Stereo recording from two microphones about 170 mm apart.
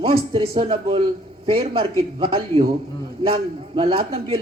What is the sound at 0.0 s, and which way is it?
Speech, 30° right (ahead or behind).